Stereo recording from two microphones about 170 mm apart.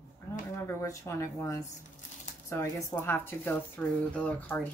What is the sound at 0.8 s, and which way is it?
Speech, 20° left (ahead or behind).